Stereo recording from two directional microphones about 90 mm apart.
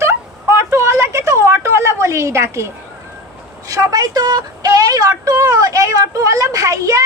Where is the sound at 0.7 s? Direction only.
30° right (ahead or behind).